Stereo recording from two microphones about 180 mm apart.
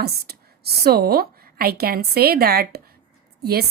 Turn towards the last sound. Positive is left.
turn(degrees=-60)  # may be behind; listen again after turning